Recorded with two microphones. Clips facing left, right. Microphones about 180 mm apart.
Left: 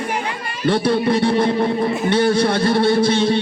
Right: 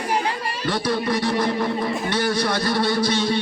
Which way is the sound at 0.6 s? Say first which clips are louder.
Left 7 dB; 25° left (ahead or behind).